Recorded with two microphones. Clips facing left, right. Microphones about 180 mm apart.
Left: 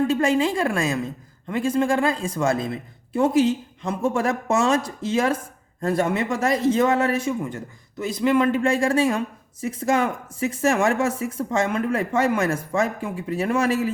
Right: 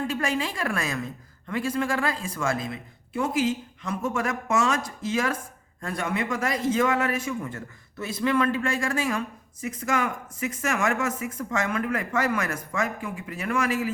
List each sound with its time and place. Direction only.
0.1 s speech: 25° left (ahead or behind)